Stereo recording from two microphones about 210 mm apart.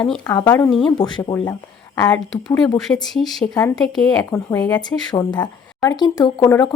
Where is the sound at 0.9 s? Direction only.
20° left (ahead or behind).